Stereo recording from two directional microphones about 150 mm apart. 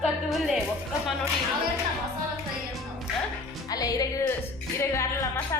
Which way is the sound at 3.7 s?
25° left (ahead or behind).